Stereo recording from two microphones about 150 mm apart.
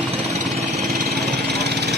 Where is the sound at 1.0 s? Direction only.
90° right.